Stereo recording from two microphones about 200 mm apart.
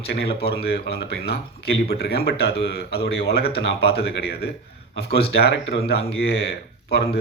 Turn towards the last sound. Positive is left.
turn(degrees=55)  # may be behind; listen again after turning